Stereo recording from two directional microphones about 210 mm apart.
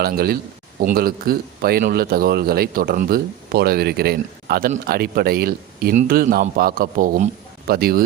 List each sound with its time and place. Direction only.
0.0 s a man's voice: 45° right (ahead or behind)